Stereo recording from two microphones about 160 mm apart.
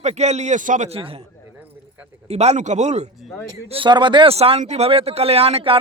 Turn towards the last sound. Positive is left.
turn(degrees=-35)  # may be behind; listen again after turning